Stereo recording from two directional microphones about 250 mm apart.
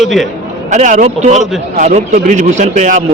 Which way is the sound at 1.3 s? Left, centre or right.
Centre.